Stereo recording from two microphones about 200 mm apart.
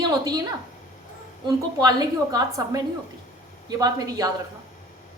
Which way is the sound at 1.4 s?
20° right (ahead or behind).